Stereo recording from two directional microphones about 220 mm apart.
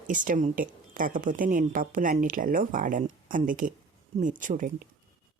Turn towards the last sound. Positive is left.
turn(degrees=-35)  # may be behind; listen again after turning